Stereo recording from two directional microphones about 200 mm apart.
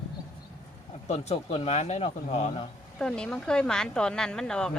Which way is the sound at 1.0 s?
30° left (ahead or behind).